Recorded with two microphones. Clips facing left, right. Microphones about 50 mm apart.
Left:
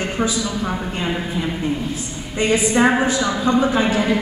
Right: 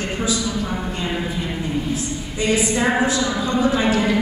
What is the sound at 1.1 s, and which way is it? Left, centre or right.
Speech, centre.